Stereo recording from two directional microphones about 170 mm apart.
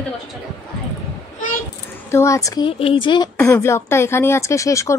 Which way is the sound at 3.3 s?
15° left (ahead or behind).